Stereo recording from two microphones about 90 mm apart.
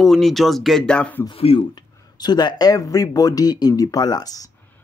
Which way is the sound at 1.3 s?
85° left.